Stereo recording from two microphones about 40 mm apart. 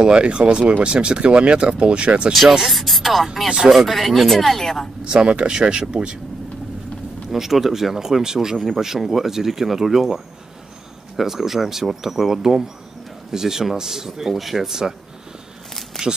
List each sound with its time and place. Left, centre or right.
0.0 s speech: right
2.6 s speech: centre
3.4 s speech: centre
3.7 s speech: centre
5.0 s speech: right
7.2 s speech: centre
16.0 s speech: centre